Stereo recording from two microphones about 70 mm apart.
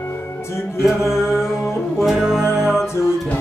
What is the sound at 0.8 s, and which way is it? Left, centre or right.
Music, centre.